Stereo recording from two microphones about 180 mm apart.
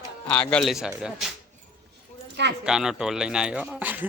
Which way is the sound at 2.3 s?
70° right (ahead or behind).